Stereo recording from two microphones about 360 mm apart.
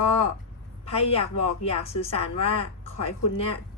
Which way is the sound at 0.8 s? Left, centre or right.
Centre.